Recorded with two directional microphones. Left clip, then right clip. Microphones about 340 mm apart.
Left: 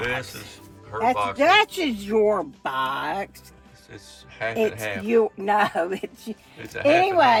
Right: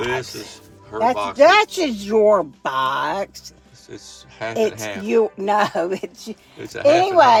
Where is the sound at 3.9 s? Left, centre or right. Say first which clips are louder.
Right 5 dB; centre.